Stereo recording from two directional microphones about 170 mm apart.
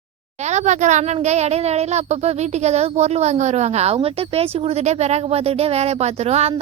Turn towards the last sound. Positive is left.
turn(degrees=-40)  # may be behind; listen again after turning